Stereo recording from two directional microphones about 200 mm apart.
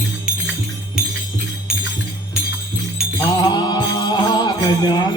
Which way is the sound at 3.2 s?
20° left (ahead or behind).